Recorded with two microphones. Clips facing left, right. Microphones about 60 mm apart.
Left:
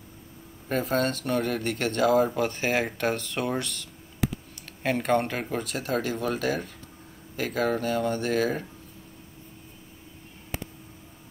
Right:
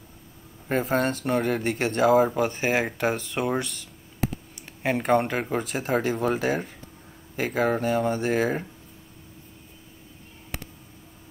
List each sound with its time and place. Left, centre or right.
0.7 s speech: centre